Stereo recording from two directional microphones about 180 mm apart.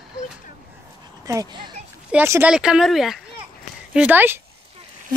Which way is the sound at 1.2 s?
20° right (ahead or behind).